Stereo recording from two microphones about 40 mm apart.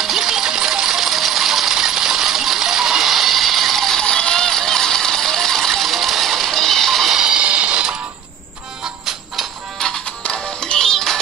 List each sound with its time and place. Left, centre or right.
0.0 s coin: centre
4.0 s coin: left; by 7.2 s centre
7.3 s music: right
9.8 s music: centre
10.8 s music: centre